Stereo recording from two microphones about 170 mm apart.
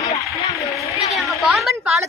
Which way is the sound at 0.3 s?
20° left (ahead or behind).